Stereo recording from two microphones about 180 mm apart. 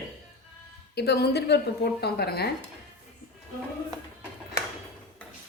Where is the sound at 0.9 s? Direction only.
65° left (ahead or behind).